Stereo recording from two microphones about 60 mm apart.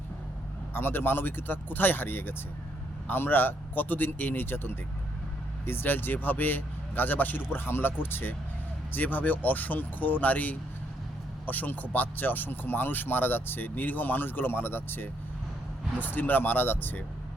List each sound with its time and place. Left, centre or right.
0.7 s speech: left